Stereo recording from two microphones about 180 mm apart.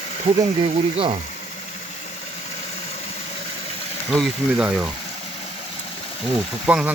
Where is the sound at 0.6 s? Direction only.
30° right (ahead or behind).